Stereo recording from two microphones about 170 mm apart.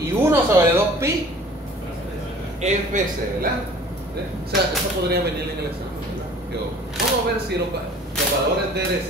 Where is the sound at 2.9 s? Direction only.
45° right (ahead or behind).